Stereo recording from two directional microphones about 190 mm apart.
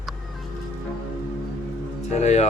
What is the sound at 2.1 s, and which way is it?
Music, 35° left (ahead or behind).